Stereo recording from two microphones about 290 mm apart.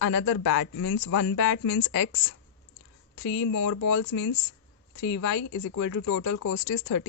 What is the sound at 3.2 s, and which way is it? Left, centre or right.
Speech, left.